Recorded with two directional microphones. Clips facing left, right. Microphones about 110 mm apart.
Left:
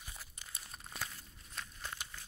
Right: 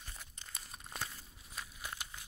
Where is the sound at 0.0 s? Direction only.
5° left (ahead or behind).